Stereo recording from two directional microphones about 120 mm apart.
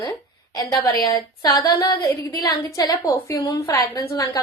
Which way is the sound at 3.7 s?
30° left (ahead or behind).